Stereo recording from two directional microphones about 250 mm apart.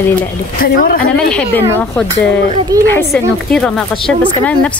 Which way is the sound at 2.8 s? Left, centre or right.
Centre.